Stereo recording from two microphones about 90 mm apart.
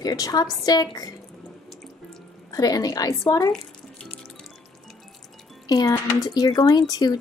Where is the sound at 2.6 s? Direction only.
45° left (ahead or behind).